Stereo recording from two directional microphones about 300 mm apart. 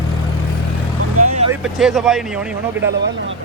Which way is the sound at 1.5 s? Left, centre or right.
Centre.